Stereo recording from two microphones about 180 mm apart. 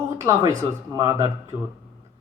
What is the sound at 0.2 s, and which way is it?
A man's voice, 15° right (ahead or behind).